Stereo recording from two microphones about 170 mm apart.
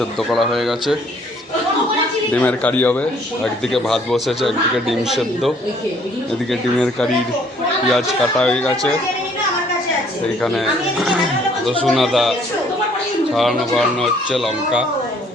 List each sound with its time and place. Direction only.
0.0 s a man's voice: centre (ahead or behind)
2.3 s a man's voice: 10° left (ahead or behind)
10.4 s a man's voice: centre (ahead or behind)
13.3 s a man's voice: centre (ahead or behind)